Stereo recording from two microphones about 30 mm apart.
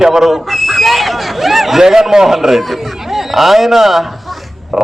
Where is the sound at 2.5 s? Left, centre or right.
Centre.